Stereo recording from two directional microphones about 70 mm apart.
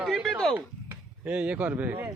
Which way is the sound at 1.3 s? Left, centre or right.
Centre.